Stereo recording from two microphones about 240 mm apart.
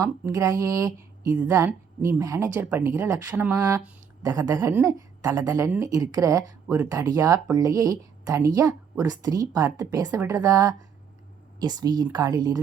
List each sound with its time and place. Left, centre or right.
0.0 s speech: centre